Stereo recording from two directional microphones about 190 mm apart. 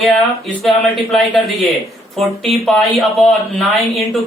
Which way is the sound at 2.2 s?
Centre (ahead or behind).